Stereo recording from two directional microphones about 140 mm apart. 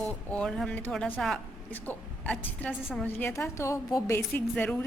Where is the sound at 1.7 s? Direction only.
15° left (ahead or behind).